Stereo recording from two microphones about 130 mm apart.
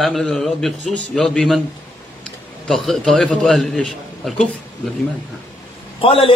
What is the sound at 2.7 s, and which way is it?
A man's voice, centre (ahead or behind).